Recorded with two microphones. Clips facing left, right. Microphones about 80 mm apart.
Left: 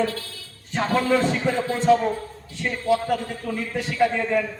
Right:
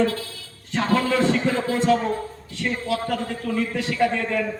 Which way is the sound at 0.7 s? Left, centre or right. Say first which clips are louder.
Even; centre.